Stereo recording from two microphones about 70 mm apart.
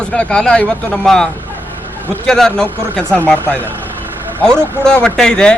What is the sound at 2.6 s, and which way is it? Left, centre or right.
Speech, right.